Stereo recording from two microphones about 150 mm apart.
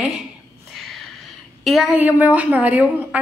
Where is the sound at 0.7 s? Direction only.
Centre (ahead or behind).